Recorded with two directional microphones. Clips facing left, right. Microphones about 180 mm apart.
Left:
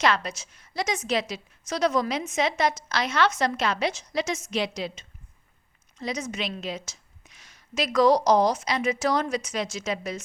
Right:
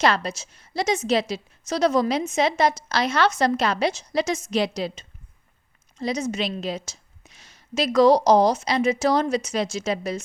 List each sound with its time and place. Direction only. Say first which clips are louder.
0.0 s a woman's voice: right 3 dB; 35° right (ahead or behind)